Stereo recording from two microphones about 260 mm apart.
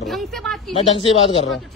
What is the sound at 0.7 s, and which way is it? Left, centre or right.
Speech, left.